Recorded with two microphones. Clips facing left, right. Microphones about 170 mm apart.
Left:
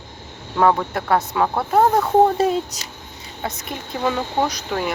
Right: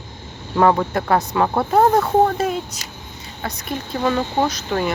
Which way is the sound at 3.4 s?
25° left (ahead or behind).